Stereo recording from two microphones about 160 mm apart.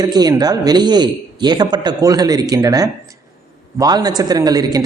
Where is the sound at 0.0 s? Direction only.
25° right (ahead or behind).